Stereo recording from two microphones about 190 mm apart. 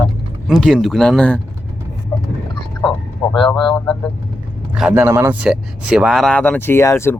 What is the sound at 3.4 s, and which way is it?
Speech, 25° left (ahead or behind).